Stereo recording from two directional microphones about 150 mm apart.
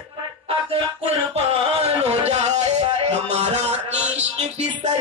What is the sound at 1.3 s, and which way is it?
Music, 45° right (ahead or behind).